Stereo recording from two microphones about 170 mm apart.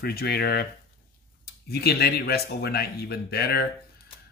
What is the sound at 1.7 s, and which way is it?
Speech, 70° left (ahead or behind).